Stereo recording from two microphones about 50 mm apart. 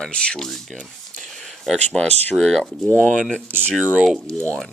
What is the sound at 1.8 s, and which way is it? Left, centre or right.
Speech, left.